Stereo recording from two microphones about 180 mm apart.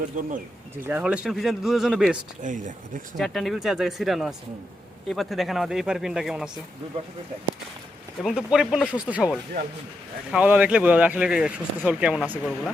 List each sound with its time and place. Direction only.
0.1 s speech: 45° right (ahead or behind)
0.9 s a man's voice: 10° right (ahead or behind)
2.4 s speech: 45° right (ahead or behind)
3.2 s a man's voice: centre (ahead or behind)
8.2 s a man's voice: 5° right (ahead or behind)